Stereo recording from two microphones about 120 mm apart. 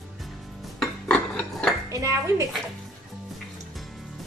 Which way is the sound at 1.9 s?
25° right (ahead or behind).